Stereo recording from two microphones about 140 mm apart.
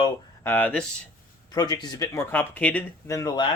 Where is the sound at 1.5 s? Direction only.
30° left (ahead or behind); by 3.1 s 10° left (ahead or behind).